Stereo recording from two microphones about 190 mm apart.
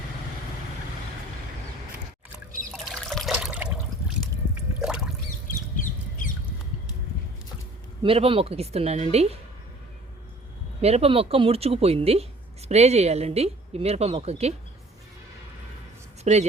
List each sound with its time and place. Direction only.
2.8 s water: centre (ahead or behind)
3.4 s toilet flush: 5° right (ahead or behind)
4.8 s a sound: 5° right (ahead or behind)
5.7 s a sound: 45° left (ahead or behind)
8.0 s speech: 30° right (ahead or behind)
10.8 s speech: 35° right (ahead or behind)
16.2 s speech: 35° right (ahead or behind)